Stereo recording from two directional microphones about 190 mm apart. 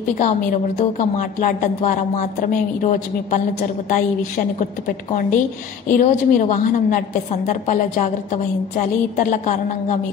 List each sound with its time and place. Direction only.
0.2 s a woman's voice: 40° left (ahead or behind)